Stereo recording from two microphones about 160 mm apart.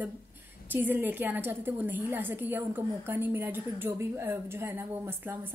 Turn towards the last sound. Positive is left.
turn(degrees=-15)  # may be behind; listen again after turning